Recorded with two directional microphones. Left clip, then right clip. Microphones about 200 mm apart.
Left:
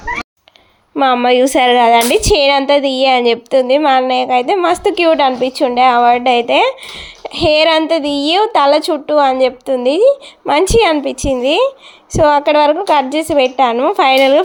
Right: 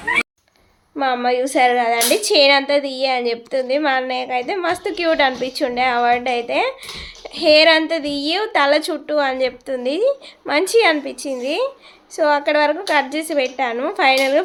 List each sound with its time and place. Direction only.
0.9 s a woman's voice: 40° left (ahead or behind)